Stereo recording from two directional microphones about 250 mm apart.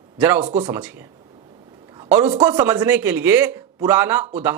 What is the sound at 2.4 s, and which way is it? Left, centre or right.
Speech, centre.